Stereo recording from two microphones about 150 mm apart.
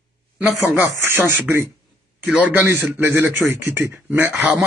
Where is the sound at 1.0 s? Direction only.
15° right (ahead or behind).